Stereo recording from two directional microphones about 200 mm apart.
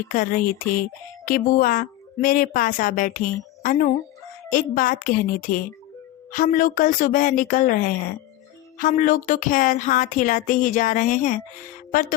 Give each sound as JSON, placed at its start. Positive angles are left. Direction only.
{"t": 0.1, "sound": "speech", "side_deg": 40}